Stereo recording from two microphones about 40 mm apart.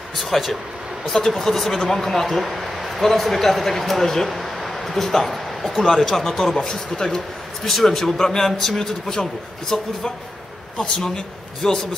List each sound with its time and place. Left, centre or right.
0.1 s a man's voice: centre